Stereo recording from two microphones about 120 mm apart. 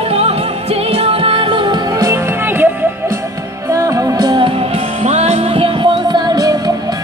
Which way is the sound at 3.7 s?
25° right (ahead or behind).